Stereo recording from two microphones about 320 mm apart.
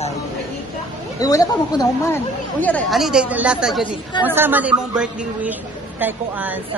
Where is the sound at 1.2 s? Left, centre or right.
Centre.